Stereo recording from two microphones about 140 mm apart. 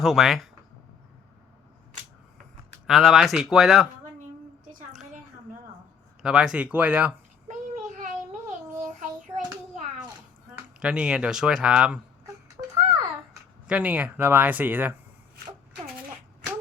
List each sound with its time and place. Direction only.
0.0 s speech: centre (ahead or behind)
2.8 s speech: centre (ahead or behind)
6.2 s speech: 5° right (ahead or behind)
7.9 s a sound: 65° right (ahead or behind)
9.0 s hands: 65° right (ahead or behind)
10.8 s speech: 5° right (ahead or behind)
13.7 s speech: 10° right (ahead or behind)